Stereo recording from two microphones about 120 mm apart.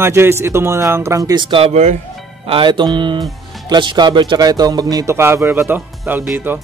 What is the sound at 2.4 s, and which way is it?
Speech, 45° right (ahead or behind).